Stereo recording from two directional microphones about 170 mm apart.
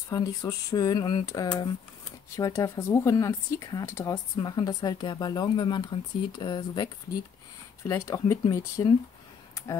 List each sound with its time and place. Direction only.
0.1 s speech: 20° left (ahead or behind)
7.9 s speech: 15° left (ahead or behind)